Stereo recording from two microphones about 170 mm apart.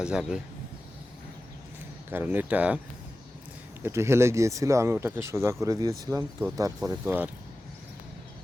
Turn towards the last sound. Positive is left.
turn(degrees=-15)  # may be behind; listen again after turning